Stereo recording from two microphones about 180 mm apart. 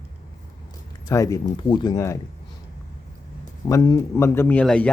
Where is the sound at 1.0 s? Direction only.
20° left (ahead or behind).